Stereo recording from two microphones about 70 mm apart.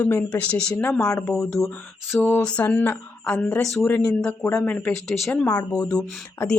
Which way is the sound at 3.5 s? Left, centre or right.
Centre.